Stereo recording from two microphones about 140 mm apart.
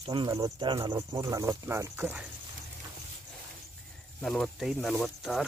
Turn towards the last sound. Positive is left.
turn(degrees=0)  # may be behind; listen again after turning